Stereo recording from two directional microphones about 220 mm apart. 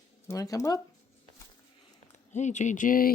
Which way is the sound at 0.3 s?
15° left (ahead or behind).